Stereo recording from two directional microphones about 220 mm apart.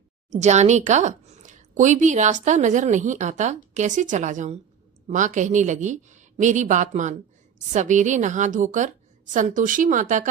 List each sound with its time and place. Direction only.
0.3 s speech: 30° right (ahead or behind)